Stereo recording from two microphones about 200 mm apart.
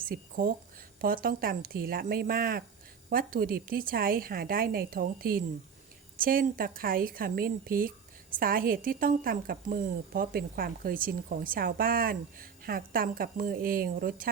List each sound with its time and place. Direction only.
0.0 s a woman's voice: 45° right (ahead or behind)